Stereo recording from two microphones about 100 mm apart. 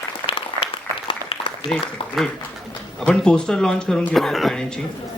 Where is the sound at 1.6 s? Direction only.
5° left (ahead or behind).